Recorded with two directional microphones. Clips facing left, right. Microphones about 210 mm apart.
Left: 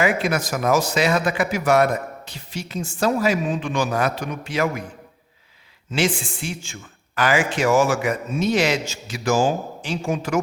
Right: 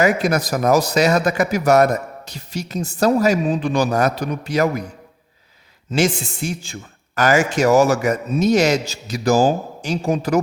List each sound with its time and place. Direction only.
0.0 s speech: 40° right (ahead or behind)
5.9 s speech: 40° right (ahead or behind)